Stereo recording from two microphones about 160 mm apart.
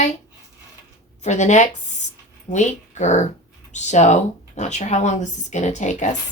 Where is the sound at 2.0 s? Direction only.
45° left (ahead or behind).